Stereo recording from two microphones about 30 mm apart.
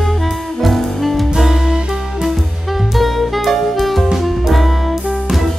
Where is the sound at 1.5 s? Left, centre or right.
Centre.